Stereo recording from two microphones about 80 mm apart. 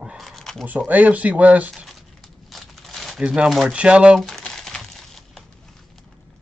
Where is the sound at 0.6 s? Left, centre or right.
Right.